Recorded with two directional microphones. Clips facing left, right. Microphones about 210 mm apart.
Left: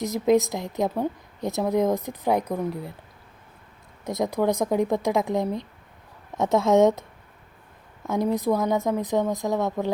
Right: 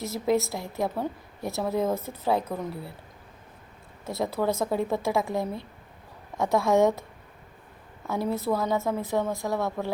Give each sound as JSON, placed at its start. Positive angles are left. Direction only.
{"t": 0.0, "sound": "a woman's voice", "side_deg": 15}
{"t": 4.0, "sound": "a woman's voice", "side_deg": 15}
{"t": 8.0, "sound": "a woman's voice", "side_deg": 20}